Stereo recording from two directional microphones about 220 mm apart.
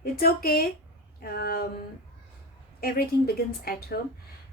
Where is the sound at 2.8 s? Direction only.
45° left (ahead or behind).